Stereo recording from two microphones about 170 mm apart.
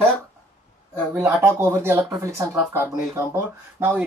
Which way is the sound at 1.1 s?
15° right (ahead or behind).